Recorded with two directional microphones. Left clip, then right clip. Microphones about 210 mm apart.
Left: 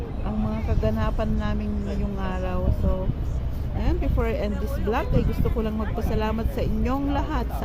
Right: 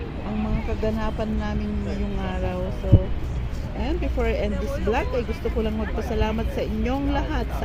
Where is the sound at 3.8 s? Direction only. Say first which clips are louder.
Right 2 dB; 5° right (ahead or behind).